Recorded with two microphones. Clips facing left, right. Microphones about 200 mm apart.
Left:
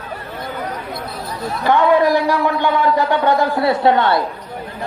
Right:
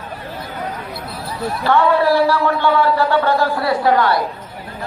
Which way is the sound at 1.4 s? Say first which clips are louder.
Even; 15° left (ahead or behind).